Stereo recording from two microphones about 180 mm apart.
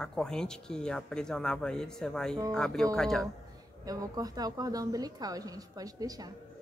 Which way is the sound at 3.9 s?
20° right (ahead or behind).